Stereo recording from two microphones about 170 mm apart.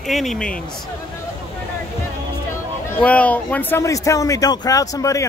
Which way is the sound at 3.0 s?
10° left (ahead or behind).